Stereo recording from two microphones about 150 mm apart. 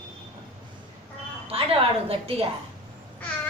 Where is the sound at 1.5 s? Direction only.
40° right (ahead or behind).